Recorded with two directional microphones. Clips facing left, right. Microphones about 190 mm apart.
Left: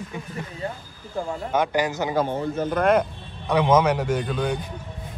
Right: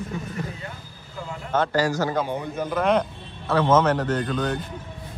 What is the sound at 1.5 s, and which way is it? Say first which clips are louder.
Speech: right 2 dB; 15° left (ahead or behind).